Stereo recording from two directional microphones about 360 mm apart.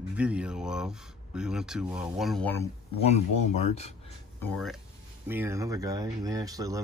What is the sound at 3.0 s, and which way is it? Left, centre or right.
Speech, centre.